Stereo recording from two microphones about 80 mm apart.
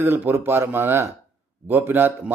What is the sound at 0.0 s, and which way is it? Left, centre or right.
A man's voice, right.